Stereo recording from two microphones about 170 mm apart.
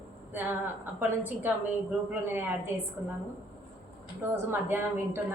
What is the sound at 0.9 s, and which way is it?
Speech, 10° right (ahead or behind).